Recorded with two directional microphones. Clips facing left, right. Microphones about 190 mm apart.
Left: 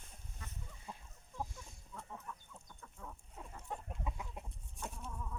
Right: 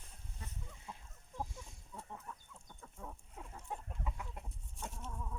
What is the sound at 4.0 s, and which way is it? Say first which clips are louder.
Chicken: left 1 dB; 5° left (ahead or behind).